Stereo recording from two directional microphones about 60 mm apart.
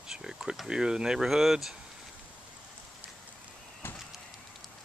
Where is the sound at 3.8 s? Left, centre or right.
Left.